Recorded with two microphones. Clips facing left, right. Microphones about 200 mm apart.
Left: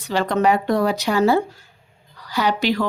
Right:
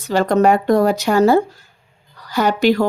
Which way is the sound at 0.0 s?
45° right (ahead or behind).